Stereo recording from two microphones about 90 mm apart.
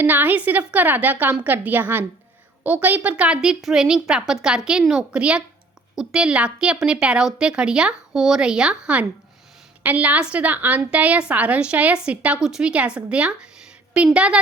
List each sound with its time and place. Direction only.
0.0 s a woman's voice: 20° right (ahead or behind)